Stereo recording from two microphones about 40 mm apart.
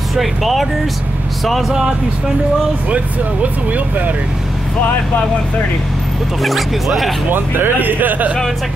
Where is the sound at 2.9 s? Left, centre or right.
Right.